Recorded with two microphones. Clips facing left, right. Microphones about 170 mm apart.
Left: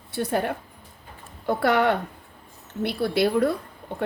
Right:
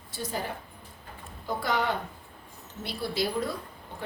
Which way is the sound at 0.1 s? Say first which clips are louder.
Left 9 dB; 65° left (ahead or behind).